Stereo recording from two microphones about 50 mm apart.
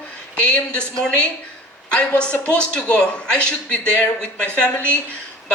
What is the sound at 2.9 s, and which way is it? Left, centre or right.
Speech, left.